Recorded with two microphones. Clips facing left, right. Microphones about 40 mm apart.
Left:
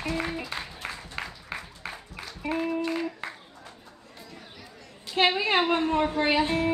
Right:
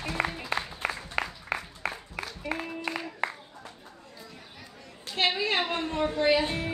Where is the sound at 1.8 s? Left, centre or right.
Right.